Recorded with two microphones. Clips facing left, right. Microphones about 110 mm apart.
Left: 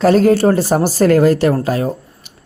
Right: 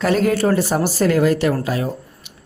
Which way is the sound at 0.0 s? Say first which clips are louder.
Left 6 dB; 35° left (ahead or behind).